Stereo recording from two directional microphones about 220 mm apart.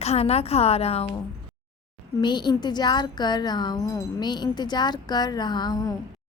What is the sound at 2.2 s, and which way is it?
Speech, 20° left (ahead or behind).